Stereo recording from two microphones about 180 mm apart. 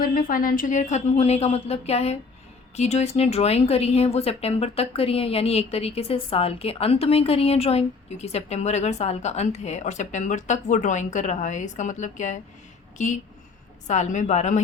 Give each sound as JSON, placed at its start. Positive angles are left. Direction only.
{"t": 0.0, "sound": "a woman's voice", "side_deg": 50}